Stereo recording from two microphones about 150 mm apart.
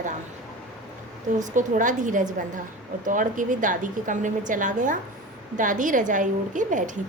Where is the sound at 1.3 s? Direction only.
55° right (ahead or behind).